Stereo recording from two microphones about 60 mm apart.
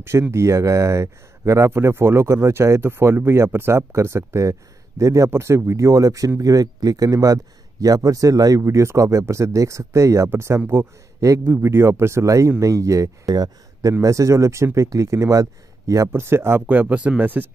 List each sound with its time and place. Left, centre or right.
0.3 s speech: right
1.7 s speech: right
2.3 s speech: right
5.3 s speech: right
11.1 s a man's voice: right
11.4 s speech: right
12.3 s speech: right
13.3 s speech: right
14.0 s speech: right
16.1 s speech: right
16.6 s speech: right